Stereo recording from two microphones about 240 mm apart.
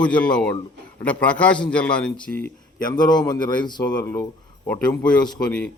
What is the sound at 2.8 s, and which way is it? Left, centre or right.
A man's voice, centre.